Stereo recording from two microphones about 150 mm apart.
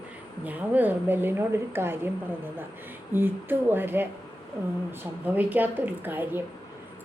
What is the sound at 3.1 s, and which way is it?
A woman's voice, 15° right (ahead or behind).